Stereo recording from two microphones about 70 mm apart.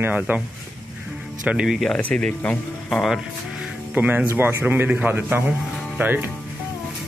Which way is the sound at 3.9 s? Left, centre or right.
Right.